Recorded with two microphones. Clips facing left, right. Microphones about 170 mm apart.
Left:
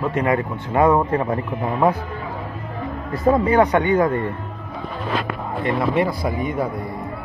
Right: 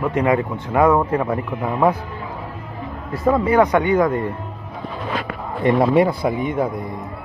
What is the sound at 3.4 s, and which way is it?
Speech, 10° right (ahead or behind).